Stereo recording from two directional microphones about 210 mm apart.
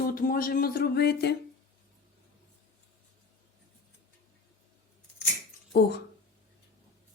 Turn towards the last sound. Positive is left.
turn(degrees=50)  # may be behind; listen again after turning